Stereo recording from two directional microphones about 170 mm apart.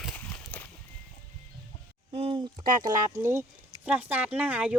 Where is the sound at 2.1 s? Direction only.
30° right (ahead or behind).